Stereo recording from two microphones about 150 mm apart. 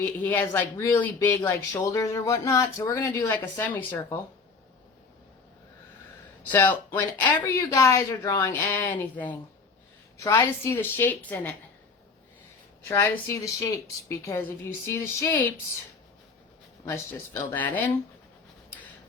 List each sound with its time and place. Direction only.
0.0 s speech: 10° left (ahead or behind)
6.5 s speech: 10° left (ahead or behind)
13.1 s speech: 15° left (ahead or behind)
17.5 s speech: 10° left (ahead or behind)